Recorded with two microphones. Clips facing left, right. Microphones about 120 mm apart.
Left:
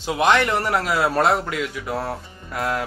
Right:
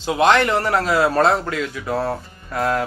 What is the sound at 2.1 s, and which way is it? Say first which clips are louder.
Speech: right 4 dB; 25° right (ahead or behind).